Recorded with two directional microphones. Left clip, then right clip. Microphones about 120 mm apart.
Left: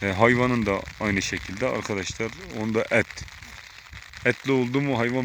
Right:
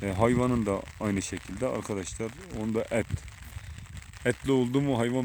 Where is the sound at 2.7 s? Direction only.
5° left (ahead or behind).